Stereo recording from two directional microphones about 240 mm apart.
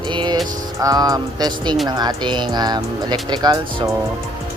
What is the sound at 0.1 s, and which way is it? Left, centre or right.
Music, centre.